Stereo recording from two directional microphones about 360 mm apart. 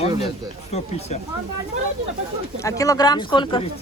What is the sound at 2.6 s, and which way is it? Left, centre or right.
Speech, centre.